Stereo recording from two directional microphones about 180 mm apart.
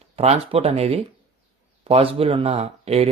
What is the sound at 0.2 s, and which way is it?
Speech, 35° right (ahead or behind).